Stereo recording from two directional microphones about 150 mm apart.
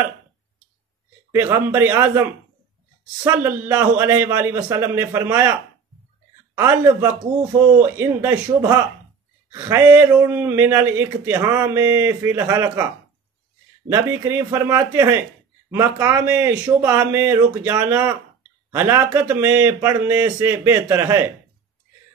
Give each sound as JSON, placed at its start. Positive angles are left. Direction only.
{"t": 1.3, "sound": "speech", "side_deg": -15}
{"t": 3.3, "sound": "speech", "side_deg": -15}
{"t": 6.7, "sound": "speech", "side_deg": -15}
{"t": 9.5, "sound": "speech", "side_deg": -20}
{"t": 13.9, "sound": "speech", "side_deg": -15}